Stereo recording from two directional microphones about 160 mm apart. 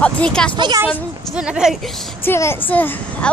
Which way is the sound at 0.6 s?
30° right (ahead or behind).